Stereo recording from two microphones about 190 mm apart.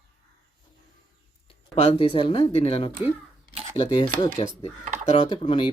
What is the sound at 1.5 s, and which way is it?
Speech, 30° left (ahead or behind).